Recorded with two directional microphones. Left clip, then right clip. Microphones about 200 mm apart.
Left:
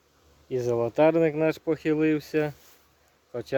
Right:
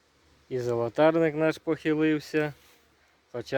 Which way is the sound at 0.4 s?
Centre (ahead or behind).